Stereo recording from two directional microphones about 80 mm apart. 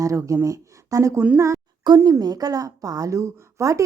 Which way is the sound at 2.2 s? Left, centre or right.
Right.